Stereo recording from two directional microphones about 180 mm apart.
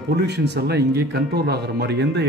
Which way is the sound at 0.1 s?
70° right (ahead or behind).